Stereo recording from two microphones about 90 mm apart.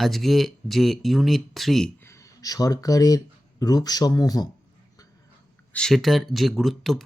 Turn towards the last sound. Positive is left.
turn(degrees=0)  # may be behind; listen again after turning